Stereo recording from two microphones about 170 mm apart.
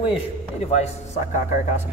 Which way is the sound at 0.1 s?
40° left (ahead or behind).